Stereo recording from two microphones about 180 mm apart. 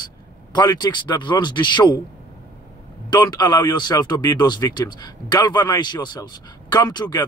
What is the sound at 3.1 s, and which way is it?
A man's voice, 20° left (ahead or behind).